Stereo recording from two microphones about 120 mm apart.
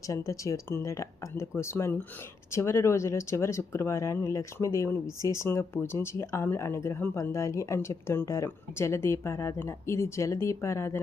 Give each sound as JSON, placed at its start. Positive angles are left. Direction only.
{"t": 0.1, "sound": "speech", "side_deg": 25}